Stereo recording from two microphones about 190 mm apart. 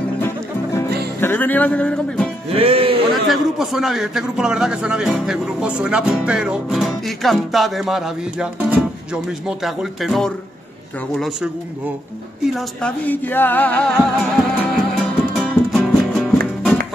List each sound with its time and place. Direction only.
1.2 s music: 10° left (ahead or behind)
2.5 s music: 30° right (ahead or behind)
3.1 s a man's voice: centre (ahead or behind)
12.5 s music: 5° left (ahead or behind)
15.3 s music: centre (ahead or behind)